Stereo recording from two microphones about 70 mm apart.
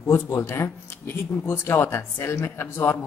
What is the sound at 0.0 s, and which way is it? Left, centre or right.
Speech, left.